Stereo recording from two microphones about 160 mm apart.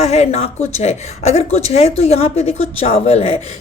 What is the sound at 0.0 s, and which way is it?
A woman's voice, 45° left (ahead or behind).